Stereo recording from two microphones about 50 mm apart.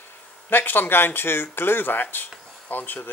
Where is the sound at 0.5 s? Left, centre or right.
Left.